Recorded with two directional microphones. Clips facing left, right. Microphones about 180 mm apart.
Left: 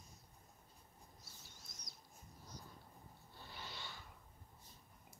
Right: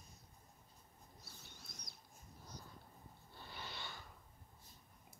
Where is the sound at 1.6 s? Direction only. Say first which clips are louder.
Right 3 dB; 60° right (ahead or behind).